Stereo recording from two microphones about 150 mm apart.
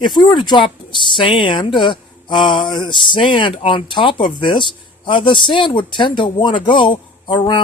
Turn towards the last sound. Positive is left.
turn(degrees=30)  # may be behind; listen again after turning